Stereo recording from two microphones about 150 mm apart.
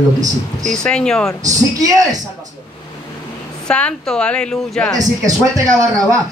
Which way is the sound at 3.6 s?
5° left (ahead or behind).